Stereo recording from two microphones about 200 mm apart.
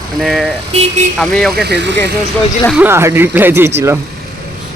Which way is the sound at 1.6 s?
60° right (ahead or behind).